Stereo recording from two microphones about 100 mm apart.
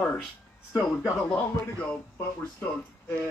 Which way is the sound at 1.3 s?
10° left (ahead or behind).